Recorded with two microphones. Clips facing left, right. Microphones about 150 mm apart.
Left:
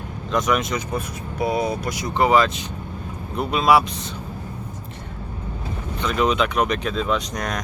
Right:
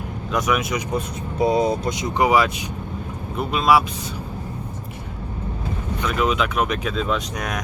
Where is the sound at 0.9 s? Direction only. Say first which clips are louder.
Right 3 dB; 25° right (ahead or behind).